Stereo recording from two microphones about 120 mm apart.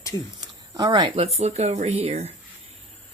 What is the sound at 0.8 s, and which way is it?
Speech, 35° right (ahead or behind).